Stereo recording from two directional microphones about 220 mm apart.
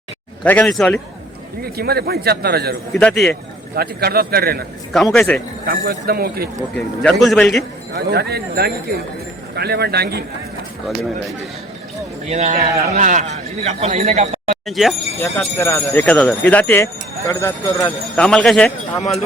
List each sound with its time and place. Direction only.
0.4 s a man's voice: 5° left (ahead or behind)
1.6 s speech: 45° right (ahead or behind)
2.9 s a man's voice: 5° left (ahead or behind)
3.8 s speech: 45° right (ahead or behind)
4.9 s a man's voice: centre (ahead or behind)
5.6 s speech: 45° right (ahead or behind)
6.7 s a man's voice: 5° left (ahead or behind)
7.9 s speech: 45° right (ahead or behind)
12.3 s a man's voice: 30° right (ahead or behind)
14.7 s a man's voice: centre (ahead or behind)
15.2 s speech: 10° left (ahead or behind)